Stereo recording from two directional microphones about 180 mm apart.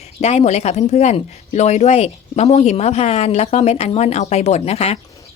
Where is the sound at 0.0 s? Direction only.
35° left (ahead or behind).